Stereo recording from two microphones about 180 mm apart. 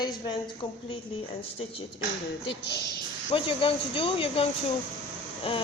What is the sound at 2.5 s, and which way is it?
Speech, 65° left (ahead or behind).